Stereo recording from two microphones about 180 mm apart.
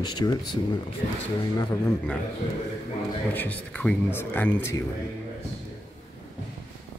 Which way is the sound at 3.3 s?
10° left (ahead or behind).